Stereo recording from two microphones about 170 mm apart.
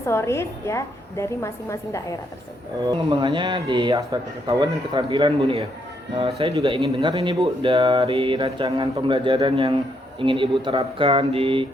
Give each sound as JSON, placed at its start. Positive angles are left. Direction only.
{"t": 0.0, "sound": "a woman's voice", "side_deg": 15}
{"t": 2.8, "sound": "speech", "side_deg": -25}